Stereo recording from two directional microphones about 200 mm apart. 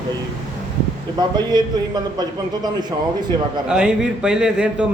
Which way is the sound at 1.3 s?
20° right (ahead or behind).